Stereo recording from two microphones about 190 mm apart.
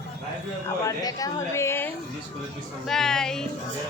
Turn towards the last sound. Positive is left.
turn(degrees=5)  # may be behind; listen again after turning